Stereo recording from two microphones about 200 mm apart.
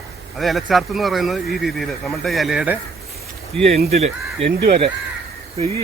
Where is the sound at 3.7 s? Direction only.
35° right (ahead or behind).